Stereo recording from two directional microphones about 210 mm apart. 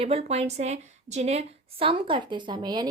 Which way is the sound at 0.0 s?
30° right (ahead or behind).